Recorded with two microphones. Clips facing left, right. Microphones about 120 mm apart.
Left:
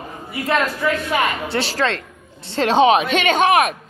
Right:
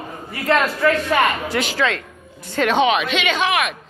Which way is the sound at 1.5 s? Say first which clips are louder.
Even; 35° left (ahead or behind).